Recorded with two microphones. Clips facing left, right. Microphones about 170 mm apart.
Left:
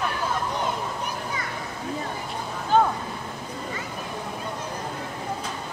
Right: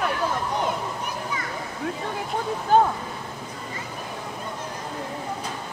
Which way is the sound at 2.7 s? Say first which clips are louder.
Right 2 dB; 45° right (ahead or behind).